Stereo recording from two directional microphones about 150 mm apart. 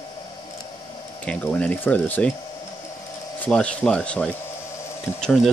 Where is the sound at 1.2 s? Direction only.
10° left (ahead or behind).